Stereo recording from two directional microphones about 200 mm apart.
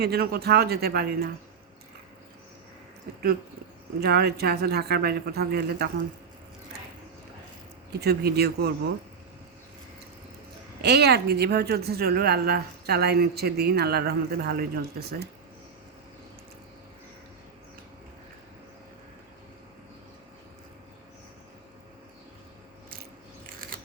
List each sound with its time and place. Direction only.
0.0 s speech: 50° right (ahead or behind)
4.0 s speech: 50° right (ahead or behind)
7.9 s speech: 55° right (ahead or behind)
10.8 s speech: 55° right (ahead or behind)